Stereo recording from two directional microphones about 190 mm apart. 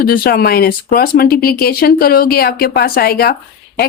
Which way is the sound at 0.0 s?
50° left (ahead or behind).